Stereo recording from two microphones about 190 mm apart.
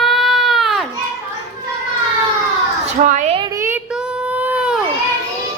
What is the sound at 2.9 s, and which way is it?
Speech, 40° right (ahead or behind).